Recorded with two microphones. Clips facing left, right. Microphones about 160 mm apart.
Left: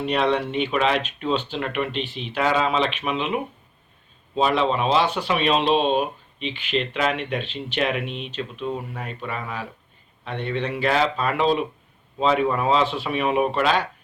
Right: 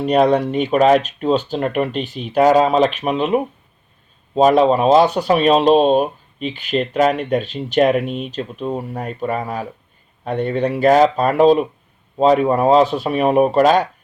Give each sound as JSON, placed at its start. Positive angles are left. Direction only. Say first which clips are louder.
{"t": 0.0, "sound": "speech", "louder": "right 7 dB", "side_deg": -45}